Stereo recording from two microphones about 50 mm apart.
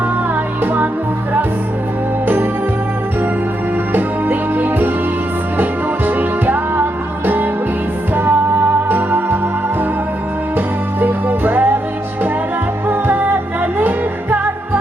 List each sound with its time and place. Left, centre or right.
0.6 s music: right
2.2 s music: right
3.9 s music: right
6.1 s music: right
11.0 s music: right
12.9 s music: right